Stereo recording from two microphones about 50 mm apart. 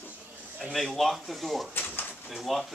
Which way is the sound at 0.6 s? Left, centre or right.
Centre.